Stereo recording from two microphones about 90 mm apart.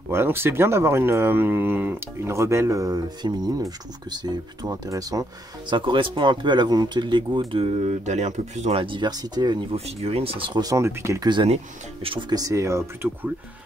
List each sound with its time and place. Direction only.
0.1 s speech: 25° right (ahead or behind); by 5.2 s 40° right (ahead or behind)
5.7 s speech: 65° right (ahead or behind)
8.7 s speech: 65° right (ahead or behind)
9.7 s speech: 90° right
10.6 s speech: 40° right (ahead or behind)
11.2 s speech: 60° right (ahead or behind)
12.0 s speech: 80° right
12.3 s speech: 40° right (ahead or behind)